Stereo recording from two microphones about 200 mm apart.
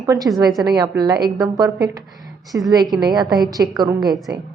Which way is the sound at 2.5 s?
15° right (ahead or behind).